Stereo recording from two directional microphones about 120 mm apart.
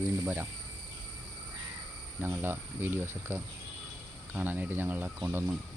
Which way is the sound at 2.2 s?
15° right (ahead or behind).